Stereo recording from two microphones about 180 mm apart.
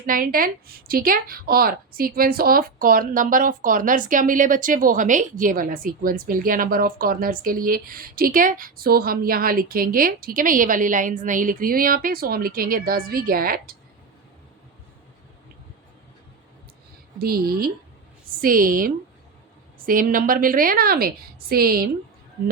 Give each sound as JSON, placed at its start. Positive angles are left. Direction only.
{"t": 0.0, "sound": "a woman's voice", "side_deg": -50}
{"t": 17.2, "sound": "a woman's voice", "side_deg": -55}